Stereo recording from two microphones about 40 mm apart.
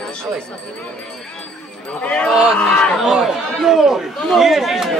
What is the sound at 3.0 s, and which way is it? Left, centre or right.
Speech, centre.